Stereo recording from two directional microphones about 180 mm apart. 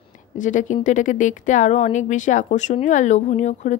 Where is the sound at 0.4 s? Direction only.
45° left (ahead or behind).